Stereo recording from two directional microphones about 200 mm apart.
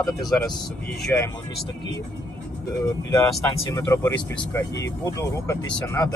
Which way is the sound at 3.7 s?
15° left (ahead or behind).